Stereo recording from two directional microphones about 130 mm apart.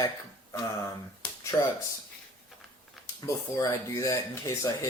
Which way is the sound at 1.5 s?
25° left (ahead or behind).